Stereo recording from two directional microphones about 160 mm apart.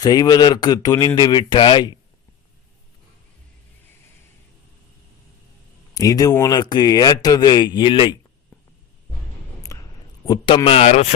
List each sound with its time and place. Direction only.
0.0 s speech: 25° left (ahead or behind)
5.9 s speech: 25° left (ahead or behind)
9.7 s a sound: 20° left (ahead or behind)
10.2 s a man's voice: 25° left (ahead or behind)